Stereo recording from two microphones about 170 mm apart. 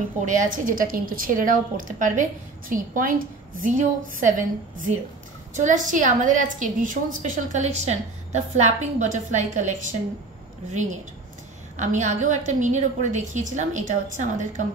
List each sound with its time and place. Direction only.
0.2 s a woman's voice: 50° right (ahead or behind)